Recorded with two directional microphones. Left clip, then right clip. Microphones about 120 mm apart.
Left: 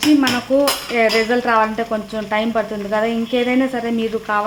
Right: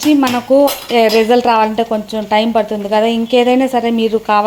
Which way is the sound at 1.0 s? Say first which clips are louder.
Right 6 dB; 30° right (ahead or behind).